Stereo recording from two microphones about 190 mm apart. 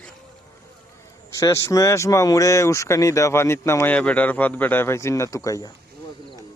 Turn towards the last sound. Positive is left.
turn(degrees=15)  # may be behind; listen again after turning